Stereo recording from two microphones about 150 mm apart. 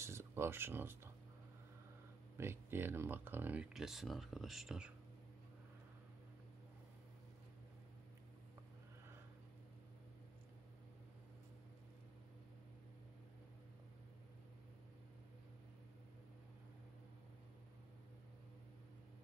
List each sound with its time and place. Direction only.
0.0 s speech: 15° right (ahead or behind)
2.3 s speech: 15° right (ahead or behind)